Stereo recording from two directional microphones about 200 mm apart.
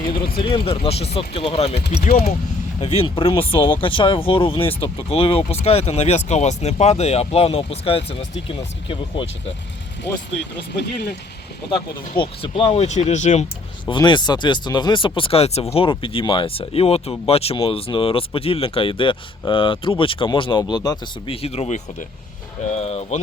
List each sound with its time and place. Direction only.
0.3 s speech: 25° left (ahead or behind)
11.7 s speech: 25° left (ahead or behind)
13.8 s speech: 20° left (ahead or behind)